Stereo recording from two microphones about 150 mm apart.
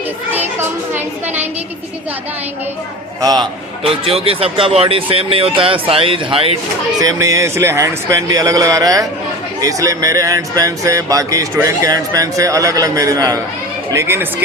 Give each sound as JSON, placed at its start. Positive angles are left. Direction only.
{"t": 3.2, "sound": "speech", "side_deg": -25}
{"t": 3.8, "sound": "speech", "side_deg": -40}
{"t": 7.0, "sound": "speech", "side_deg": -25}